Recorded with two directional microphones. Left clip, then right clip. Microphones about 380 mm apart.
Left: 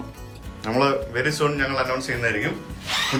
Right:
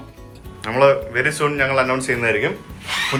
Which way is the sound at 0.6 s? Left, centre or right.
Centre.